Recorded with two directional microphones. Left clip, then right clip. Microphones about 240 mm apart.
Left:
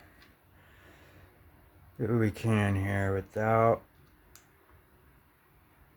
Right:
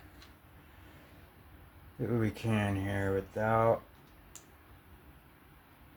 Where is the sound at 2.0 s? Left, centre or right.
Left.